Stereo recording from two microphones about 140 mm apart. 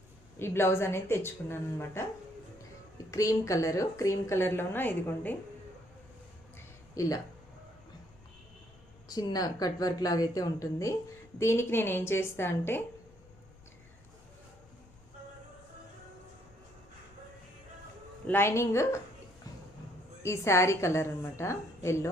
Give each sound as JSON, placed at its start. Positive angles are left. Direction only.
{"t": 0.3, "sound": "a woman's voice", "side_deg": 15}
{"t": 3.1, "sound": "a woman's voice", "side_deg": 25}
{"t": 6.9, "sound": "speech", "side_deg": 25}
{"t": 9.0, "sound": "a woman's voice", "side_deg": 30}
{"t": 18.3, "sound": "a woman's voice", "side_deg": 15}
{"t": 20.2, "sound": "a woman's voice", "side_deg": 20}